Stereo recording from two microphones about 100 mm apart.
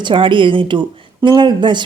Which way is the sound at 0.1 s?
55° right (ahead or behind).